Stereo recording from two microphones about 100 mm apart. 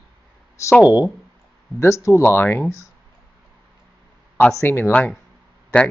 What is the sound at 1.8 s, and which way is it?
Speech, 30° left (ahead or behind).